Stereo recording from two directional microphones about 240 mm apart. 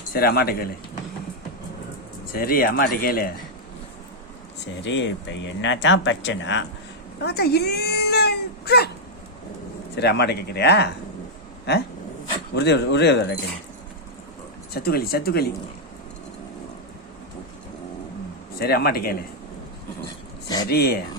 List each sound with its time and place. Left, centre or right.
0.1 s speech: left
2.3 s speech: left
4.6 s speech: left
10.0 s speech: left
12.5 s speech: left
14.7 s speech: left
18.6 s speech: left
20.7 s speech: left